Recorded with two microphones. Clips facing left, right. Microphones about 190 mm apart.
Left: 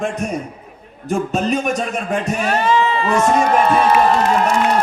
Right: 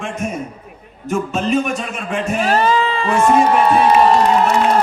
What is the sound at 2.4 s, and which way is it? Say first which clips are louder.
Speech: right 2 dB; 35° right (ahead or behind).